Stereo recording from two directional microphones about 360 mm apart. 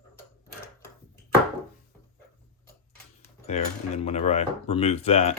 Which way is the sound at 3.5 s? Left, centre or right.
Centre.